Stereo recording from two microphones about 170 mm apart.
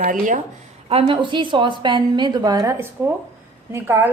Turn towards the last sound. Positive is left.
turn(degrees=-15)  # may be behind; listen again after turning